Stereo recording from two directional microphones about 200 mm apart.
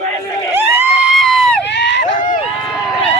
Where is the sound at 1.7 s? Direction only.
60° left (ahead or behind).